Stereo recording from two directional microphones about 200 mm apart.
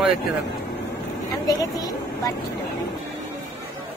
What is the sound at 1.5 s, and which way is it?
Speech, 20° left (ahead or behind).